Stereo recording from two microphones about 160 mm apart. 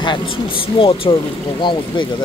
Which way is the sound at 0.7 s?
35° left (ahead or behind).